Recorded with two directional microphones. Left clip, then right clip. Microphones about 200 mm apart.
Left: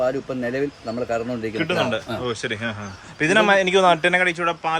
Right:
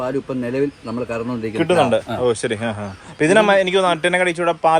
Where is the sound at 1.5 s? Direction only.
5° right (ahead or behind).